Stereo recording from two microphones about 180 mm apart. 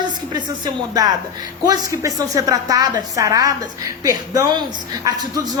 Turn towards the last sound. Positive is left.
turn(degrees=-20)  # may be behind; listen again after turning